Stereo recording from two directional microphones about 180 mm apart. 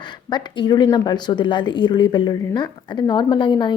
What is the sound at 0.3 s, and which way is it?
A woman's voice, 25° left (ahead or behind).